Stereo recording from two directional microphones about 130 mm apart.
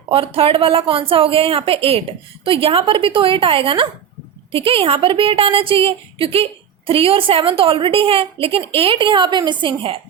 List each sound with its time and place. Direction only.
0.1 s a woman's voice: 45° right (ahead or behind)